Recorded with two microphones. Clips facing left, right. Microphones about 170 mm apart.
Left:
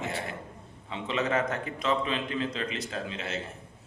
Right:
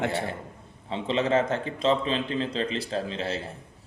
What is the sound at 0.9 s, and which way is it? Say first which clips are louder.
A man's voice: right 5 dB; 30° right (ahead or behind).